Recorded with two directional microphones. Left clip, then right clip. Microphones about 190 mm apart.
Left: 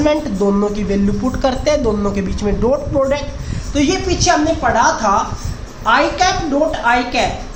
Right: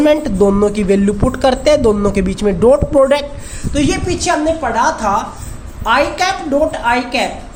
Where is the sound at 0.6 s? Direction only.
40° right (ahead or behind).